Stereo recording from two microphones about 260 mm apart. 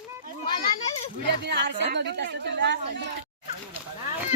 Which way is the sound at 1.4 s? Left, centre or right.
Right.